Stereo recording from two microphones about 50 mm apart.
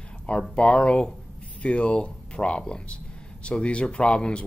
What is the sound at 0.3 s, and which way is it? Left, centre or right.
Speech, left.